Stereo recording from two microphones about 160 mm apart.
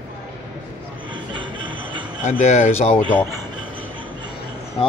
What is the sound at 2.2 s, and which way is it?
Speech, 45° left (ahead or behind).